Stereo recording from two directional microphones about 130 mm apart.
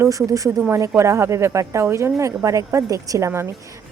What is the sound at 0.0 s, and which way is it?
A woman's voice, 25° right (ahead or behind).